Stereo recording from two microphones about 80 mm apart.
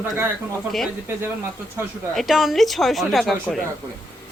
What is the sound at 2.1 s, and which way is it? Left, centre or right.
Speech, centre.